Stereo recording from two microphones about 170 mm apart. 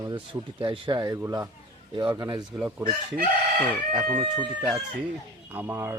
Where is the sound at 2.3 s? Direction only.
5° right (ahead or behind).